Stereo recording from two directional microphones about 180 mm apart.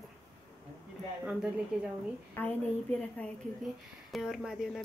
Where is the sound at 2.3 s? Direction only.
10° left (ahead or behind).